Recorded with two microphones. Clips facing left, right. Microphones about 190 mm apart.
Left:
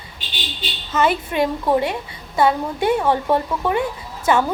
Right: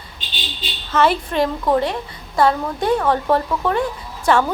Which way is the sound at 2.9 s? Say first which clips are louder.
Right 2 dB; 25° left (ahead or behind).